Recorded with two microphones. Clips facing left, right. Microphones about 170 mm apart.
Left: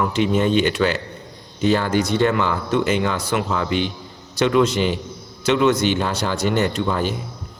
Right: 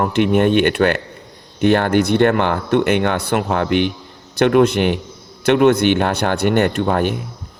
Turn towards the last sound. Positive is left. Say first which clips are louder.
# right 4 dB
turn(degrees=-60)  # may be behind; listen again after turning